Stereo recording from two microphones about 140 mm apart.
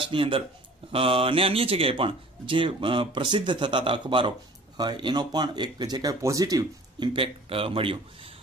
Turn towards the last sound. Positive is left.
turn(degrees=-40)  # may be behind; listen again after turning